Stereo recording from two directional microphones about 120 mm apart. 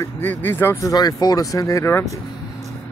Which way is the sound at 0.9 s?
30° left (ahead or behind).